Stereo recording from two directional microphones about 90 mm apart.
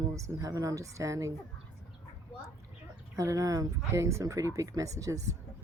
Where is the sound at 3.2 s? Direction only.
40° right (ahead or behind).